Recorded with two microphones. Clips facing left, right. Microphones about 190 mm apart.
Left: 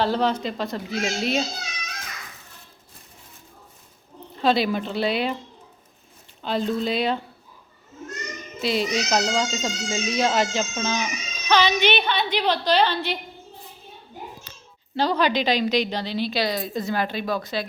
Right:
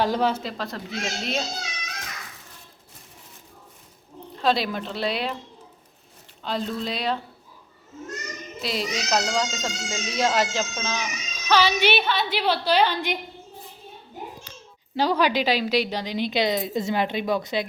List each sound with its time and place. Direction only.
0.0 s speech: 10° right (ahead or behind)
4.4 s speech: centre (ahead or behind)
6.4 s speech: centre (ahead or behind)
8.6 s speech: centre (ahead or behind)
14.9 s a woman's voice: 10° right (ahead or behind)